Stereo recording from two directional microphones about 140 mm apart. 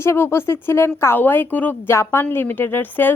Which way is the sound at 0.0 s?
20° left (ahead or behind).